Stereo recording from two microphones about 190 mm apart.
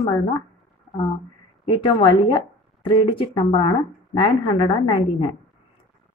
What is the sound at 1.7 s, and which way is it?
A woman's voice, 25° left (ahead or behind).